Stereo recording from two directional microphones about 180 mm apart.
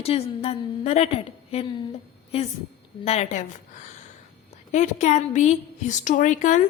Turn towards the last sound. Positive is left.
turn(degrees=45)  # may be behind; listen again after turning